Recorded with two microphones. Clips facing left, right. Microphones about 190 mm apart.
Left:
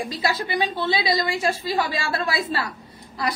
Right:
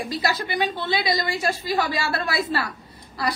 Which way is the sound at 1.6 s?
20° left (ahead or behind).